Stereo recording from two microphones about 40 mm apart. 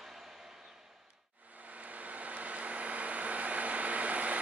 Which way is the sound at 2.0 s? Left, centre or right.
Right.